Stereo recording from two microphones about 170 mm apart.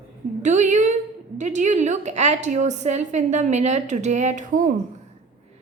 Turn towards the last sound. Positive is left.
turn(degrees=-50)  # may be behind; listen again after turning